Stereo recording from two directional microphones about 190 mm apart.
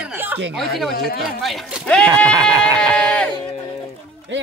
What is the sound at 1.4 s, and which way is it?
Speech, centre (ahead or behind).